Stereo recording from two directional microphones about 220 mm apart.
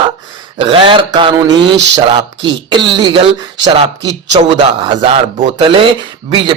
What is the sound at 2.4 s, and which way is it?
Speech, 20° right (ahead or behind).